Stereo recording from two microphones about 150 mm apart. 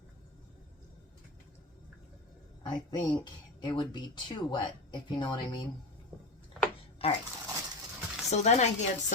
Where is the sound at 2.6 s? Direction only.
30° left (ahead or behind).